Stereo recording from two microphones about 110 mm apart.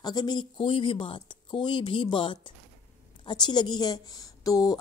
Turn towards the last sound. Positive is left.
turn(degrees=35)  # may be behind; listen again after turning